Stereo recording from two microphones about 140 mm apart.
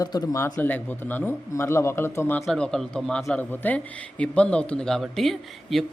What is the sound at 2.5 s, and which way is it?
A man's voice, 5° left (ahead or behind).